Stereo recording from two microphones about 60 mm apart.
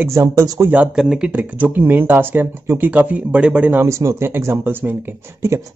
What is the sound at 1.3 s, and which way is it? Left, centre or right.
Speech, right.